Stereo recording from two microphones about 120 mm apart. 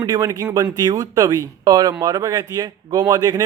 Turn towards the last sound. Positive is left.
turn(degrees=-35)  # may be behind; listen again after turning